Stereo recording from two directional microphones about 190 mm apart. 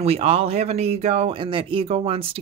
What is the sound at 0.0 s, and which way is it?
Speech, 30° right (ahead or behind).